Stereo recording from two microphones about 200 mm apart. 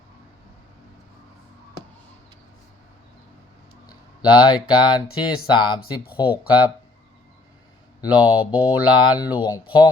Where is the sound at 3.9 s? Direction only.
25° left (ahead or behind).